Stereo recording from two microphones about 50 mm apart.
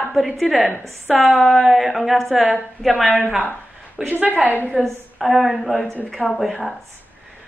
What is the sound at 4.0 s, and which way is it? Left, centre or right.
Speech, centre.